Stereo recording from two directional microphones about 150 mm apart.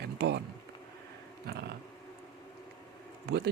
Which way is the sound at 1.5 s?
90° right.